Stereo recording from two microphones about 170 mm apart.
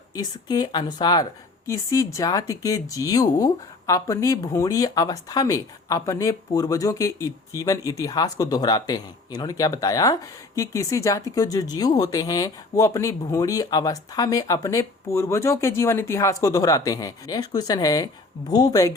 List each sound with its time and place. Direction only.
0.1 s a woman's voice: 20° left (ahead or behind)